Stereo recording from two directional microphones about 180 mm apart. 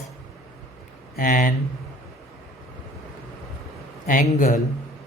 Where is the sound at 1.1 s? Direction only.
50° left (ahead or behind).